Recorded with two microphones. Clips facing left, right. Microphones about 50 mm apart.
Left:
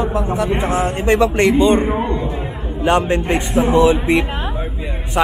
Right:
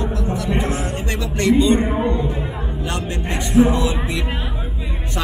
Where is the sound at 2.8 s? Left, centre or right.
Left.